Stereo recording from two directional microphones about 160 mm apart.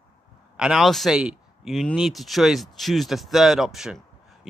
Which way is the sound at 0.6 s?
5° right (ahead or behind).